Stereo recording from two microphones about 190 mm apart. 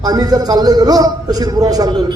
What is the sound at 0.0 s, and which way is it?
A man's voice, 20° right (ahead or behind).